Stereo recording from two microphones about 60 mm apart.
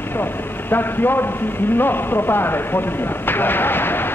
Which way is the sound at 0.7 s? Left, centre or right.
Left.